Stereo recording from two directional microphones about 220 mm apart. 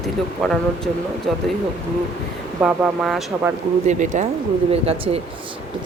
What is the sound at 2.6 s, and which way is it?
Speech, centre (ahead or behind).